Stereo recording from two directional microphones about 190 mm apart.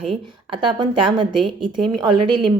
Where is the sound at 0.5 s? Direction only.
25° right (ahead or behind).